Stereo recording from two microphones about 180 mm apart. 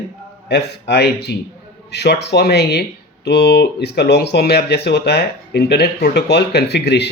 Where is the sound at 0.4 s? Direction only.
70° left (ahead or behind).